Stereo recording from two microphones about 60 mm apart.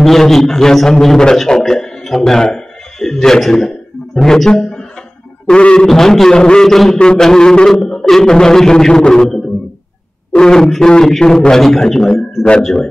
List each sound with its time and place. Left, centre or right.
0.0 s a man's voice: centre